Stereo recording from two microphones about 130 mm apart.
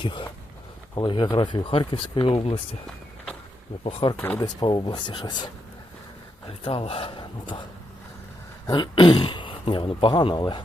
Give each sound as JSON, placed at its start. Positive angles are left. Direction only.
{"t": 0.0, "sound": "speech", "side_deg": 40}
{"t": 4.0, "sound": "speech", "side_deg": 45}
{"t": 6.5, "sound": "speech", "side_deg": 45}
{"t": 8.6, "sound": "speech", "side_deg": 35}